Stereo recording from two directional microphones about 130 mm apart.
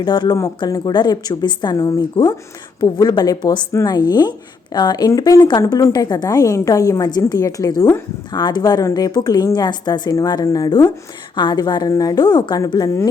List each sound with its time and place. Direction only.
0.0 s a woman's voice: 35° left (ahead or behind)